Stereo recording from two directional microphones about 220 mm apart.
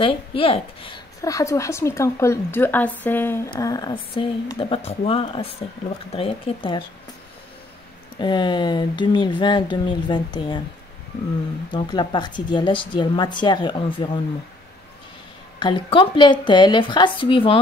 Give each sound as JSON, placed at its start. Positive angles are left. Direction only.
{"t": 0.0, "sound": "a woman's voice", "side_deg": 25}
{"t": 8.2, "sound": "speech", "side_deg": 20}
{"t": 11.7, "sound": "speech", "side_deg": 20}
{"t": 15.6, "sound": "speech", "side_deg": 20}